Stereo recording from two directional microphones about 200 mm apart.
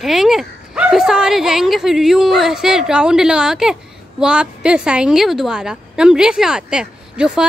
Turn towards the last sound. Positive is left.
turn(degrees=-5)  # may be behind; listen again after turning